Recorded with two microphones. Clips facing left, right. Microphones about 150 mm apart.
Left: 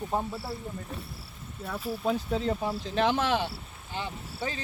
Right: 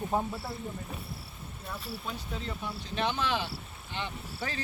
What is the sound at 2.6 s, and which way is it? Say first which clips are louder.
Speech: left 2 dB; 90° left.